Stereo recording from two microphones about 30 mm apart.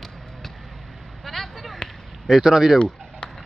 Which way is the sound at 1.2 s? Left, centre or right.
Centre.